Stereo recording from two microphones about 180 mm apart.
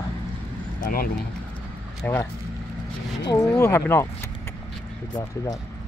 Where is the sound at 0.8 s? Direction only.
55° left (ahead or behind).